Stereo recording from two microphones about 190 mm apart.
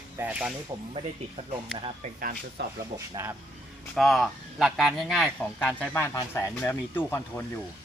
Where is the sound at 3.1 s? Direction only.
15° right (ahead or behind).